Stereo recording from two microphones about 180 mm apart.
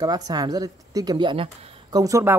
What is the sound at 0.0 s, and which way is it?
Speech, 20° right (ahead or behind).